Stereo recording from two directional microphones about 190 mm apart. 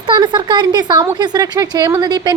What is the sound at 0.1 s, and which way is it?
A woman's voice, 25° right (ahead or behind).